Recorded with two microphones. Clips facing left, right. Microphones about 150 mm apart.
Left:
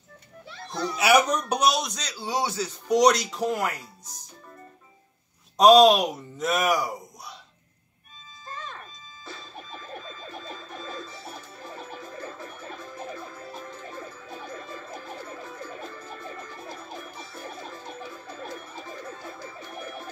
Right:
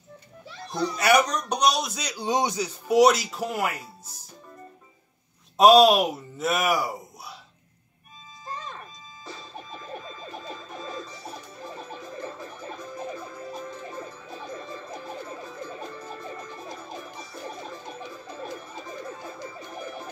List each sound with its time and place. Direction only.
0.9 s a man's voice: 5° left (ahead or behind); by 2.7 s 15° right (ahead or behind)
2.9 s speech: 5° right (ahead or behind)
5.6 s speech: centre (ahead or behind)
9.3 s a sound: 20° right (ahead or behind)
10.8 s music: 20° right (ahead or behind)